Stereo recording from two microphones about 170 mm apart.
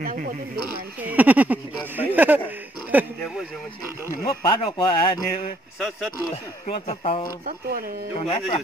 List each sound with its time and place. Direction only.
0.0 s speech: 55° right (ahead or behind)
1.0 s speech: 10° right (ahead or behind)
4.1 s speech: 25° left (ahead or behind)
5.8 s speech: centre (ahead or behind)
6.3 s speech: 40° left (ahead or behind)
8.3 s speech: 40° left (ahead or behind)